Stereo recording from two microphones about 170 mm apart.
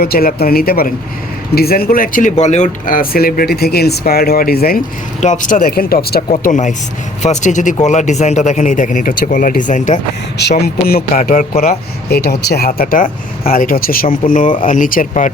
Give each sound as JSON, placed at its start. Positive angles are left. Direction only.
{"t": 0.0, "sound": "speech", "side_deg": 60}
{"t": 5.2, "sound": "speech", "side_deg": 45}
{"t": 6.3, "sound": "a man's voice", "side_deg": 45}
{"t": 10.6, "sound": "speech", "side_deg": 65}
{"t": 11.1, "sound": "a man's voice", "side_deg": 45}
{"t": 12.0, "sound": "a man's voice", "side_deg": 70}